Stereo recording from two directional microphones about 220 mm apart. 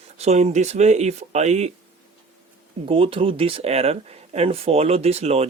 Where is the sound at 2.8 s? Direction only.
25° right (ahead or behind).